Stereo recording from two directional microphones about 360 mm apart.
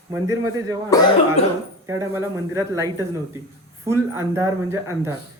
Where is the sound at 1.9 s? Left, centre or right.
Centre.